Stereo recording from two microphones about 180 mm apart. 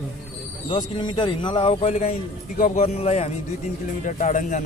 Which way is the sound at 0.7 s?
25° left (ahead or behind).